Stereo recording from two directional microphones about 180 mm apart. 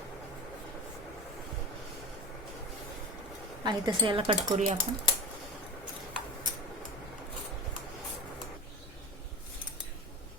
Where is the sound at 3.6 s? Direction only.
25° right (ahead or behind); by 4.8 s 40° right (ahead or behind).